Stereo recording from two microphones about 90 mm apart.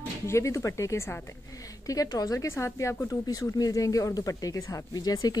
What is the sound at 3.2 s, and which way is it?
A woman's voice, 40° left (ahead or behind).